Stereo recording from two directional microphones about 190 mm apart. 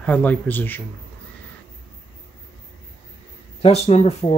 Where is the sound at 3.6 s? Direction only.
35° left (ahead or behind).